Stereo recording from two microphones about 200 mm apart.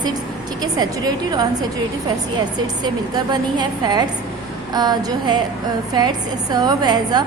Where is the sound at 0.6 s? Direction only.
20° right (ahead or behind).